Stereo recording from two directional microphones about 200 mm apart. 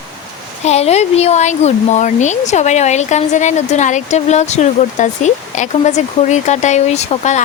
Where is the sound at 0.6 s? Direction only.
35° left (ahead or behind).